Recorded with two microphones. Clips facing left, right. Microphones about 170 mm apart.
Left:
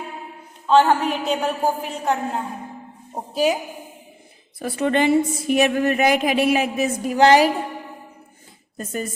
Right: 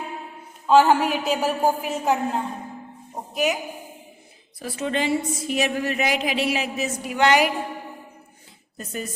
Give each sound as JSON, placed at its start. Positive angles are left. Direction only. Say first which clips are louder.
{"t": 0.7, "sound": "a woman's voice", "louder": "even", "side_deg": -10}
{"t": 3.3, "sound": "a woman's voice", "louder": "left 4 dB", "side_deg": 30}
{"t": 4.6, "sound": "a woman's voice", "louder": "left 6 dB", "side_deg": 60}
{"t": 7.1, "sound": "a woman's voice", "louder": "left 5 dB", "side_deg": 35}
{"t": 8.8, "sound": "a woman's voice", "louder": "left 4 dB", "side_deg": 45}